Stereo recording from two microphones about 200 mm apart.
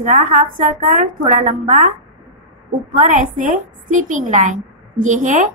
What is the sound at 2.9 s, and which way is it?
A woman's voice, 40° right (ahead or behind).